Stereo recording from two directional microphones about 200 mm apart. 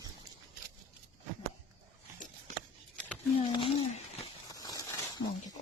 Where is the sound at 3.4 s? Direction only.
30° left (ahead or behind).